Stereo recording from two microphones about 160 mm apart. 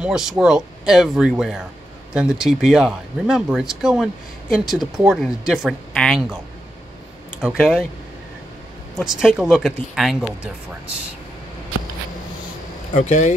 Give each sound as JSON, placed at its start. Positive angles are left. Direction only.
{"t": 0.0, "sound": "speech", "side_deg": -5}
{"t": 7.4, "sound": "speech", "side_deg": -5}
{"t": 9.0, "sound": "speech", "side_deg": 0}
{"t": 12.9, "sound": "speech", "side_deg": 50}